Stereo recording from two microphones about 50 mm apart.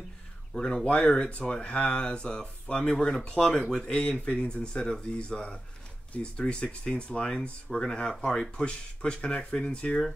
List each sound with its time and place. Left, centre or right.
0.6 s speech: centre
0.8 s speech: left